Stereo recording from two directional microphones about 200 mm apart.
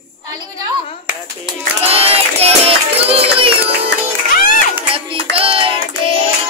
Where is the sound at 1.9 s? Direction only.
30° right (ahead or behind).